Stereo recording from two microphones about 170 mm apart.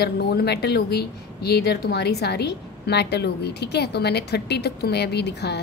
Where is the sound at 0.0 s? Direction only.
75° left (ahead or behind).